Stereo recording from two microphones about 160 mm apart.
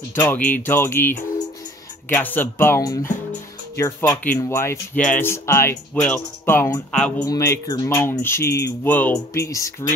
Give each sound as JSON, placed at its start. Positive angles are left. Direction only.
{"t": 0.1, "sound": "speech", "side_deg": 10}
{"t": 2.1, "sound": "speech", "side_deg": 10}